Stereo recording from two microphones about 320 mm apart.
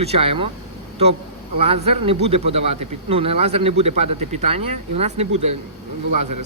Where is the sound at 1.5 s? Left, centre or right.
Centre.